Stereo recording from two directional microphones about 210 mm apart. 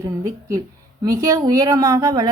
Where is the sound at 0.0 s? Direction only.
15° right (ahead or behind).